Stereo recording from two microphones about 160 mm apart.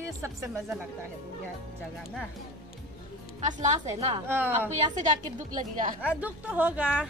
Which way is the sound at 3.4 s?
50° right (ahead or behind).